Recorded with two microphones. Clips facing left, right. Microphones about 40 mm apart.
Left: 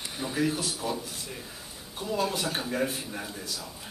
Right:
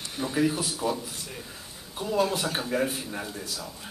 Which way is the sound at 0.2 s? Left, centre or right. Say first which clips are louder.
Right 3 dB; centre.